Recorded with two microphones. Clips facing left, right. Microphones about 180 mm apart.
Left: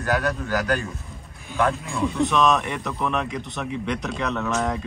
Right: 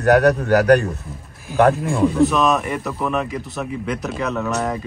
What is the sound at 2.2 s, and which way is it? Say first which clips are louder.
Speech: right 4 dB; 5° right (ahead or behind).